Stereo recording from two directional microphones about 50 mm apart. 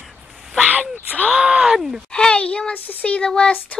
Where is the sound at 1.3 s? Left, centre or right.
Centre.